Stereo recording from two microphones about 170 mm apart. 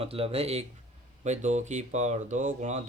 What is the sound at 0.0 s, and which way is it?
Speech, 35° right (ahead or behind).